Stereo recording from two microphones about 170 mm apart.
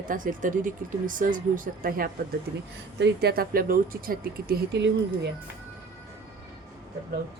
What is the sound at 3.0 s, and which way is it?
A woman's voice, 70° right (ahead or behind).